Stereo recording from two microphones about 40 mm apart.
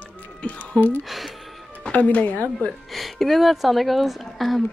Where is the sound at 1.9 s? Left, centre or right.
Left.